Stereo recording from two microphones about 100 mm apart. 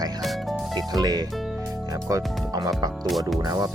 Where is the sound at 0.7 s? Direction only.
40° right (ahead or behind).